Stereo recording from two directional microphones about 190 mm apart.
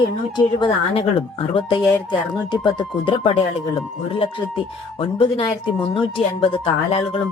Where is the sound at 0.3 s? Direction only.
25° left (ahead or behind).